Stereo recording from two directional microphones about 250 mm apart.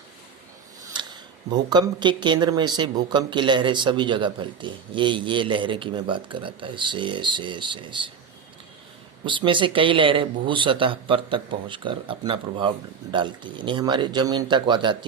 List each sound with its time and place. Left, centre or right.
0.9 s speech: centre
9.2 s speech: centre